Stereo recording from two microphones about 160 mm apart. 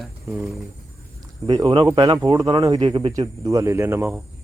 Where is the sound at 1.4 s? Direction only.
25° right (ahead or behind).